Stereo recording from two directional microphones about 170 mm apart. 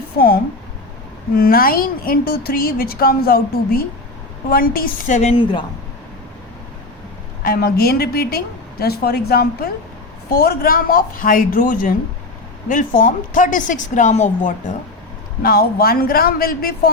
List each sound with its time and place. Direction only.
1.4 s a woman's voice: 60° left (ahead or behind); by 5.4 s 45° left (ahead or behind)
5.4 s speech: 30° left (ahead or behind)
7.4 s a woman's voice: 65° left (ahead or behind); by 14.7 s 45° left (ahead or behind)
15.4 s a woman's voice: 60° left (ahead or behind)